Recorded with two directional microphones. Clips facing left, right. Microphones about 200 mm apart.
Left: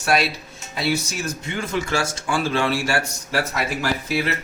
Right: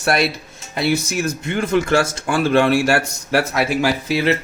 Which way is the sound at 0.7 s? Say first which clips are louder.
Right 4 dB; 60° right (ahead or behind).